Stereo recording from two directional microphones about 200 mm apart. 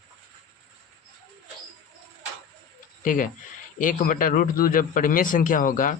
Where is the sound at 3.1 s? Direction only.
40° left (ahead or behind).